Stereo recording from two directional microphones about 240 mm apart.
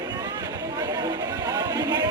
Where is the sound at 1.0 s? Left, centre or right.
Centre.